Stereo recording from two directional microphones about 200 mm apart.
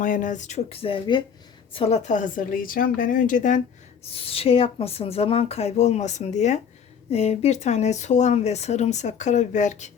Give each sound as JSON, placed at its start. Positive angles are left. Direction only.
{"t": 0.0, "sound": "speech", "side_deg": 40}
{"t": 4.0, "sound": "speech", "side_deg": 30}